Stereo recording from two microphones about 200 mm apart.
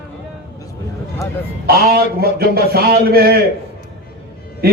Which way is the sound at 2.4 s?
50° right (ahead or behind).